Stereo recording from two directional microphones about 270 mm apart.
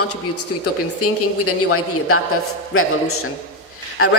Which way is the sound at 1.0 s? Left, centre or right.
Left.